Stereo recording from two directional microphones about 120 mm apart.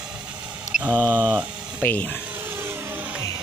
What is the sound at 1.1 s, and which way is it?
Speech, 15° right (ahead or behind).